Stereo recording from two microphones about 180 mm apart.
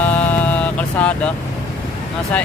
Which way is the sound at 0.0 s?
10° left (ahead or behind).